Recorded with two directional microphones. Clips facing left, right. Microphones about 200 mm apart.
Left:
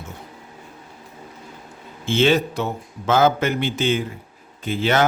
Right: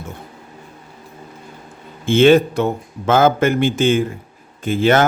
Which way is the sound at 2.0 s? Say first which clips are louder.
Right 7 dB; 55° right (ahead or behind).